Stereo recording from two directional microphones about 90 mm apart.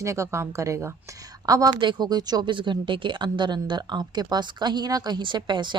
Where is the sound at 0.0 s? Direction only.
35° right (ahead or behind).